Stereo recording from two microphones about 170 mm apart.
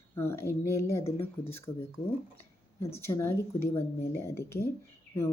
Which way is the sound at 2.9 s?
15° left (ahead or behind).